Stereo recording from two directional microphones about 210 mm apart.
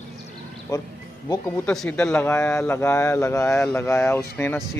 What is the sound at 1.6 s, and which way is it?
Speech, 5° left (ahead or behind).